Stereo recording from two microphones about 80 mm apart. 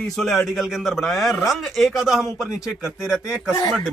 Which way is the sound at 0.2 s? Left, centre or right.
Centre.